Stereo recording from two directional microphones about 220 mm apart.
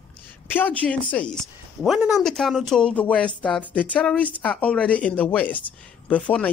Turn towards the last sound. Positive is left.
turn(degrees=5)  # may be behind; listen again after turning